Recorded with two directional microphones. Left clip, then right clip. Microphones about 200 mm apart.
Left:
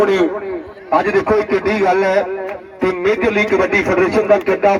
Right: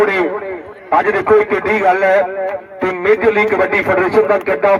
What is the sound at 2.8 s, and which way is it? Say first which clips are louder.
Speech: right 3 dB; 35° left (ahead or behind).